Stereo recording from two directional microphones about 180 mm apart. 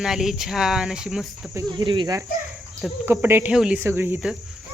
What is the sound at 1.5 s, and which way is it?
Speech, 25° right (ahead or behind).